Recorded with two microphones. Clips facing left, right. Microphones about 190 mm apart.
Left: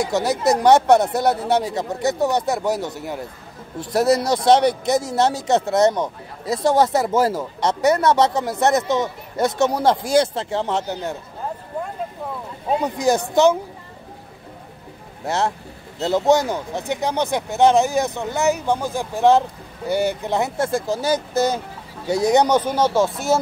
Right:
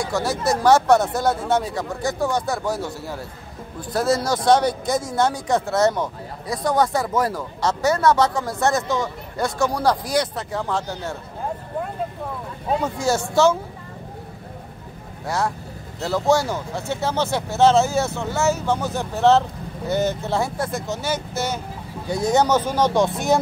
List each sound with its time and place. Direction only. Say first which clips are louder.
0.0 s speech: left 3 dB; 20° left (ahead or behind)
12.8 s speech: left 5 dB; 15° left (ahead or behind)
15.2 s speech: left 2 dB; 25° left (ahead or behind)
22.2 s speech: left 2 dB; 15° left (ahead or behind); by 23.4 s centre (ahead or behind)